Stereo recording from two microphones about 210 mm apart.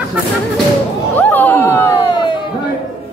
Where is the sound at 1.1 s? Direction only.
10° left (ahead or behind).